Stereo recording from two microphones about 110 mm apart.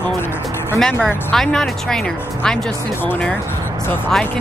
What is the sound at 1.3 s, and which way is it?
Speech, 5° left (ahead or behind).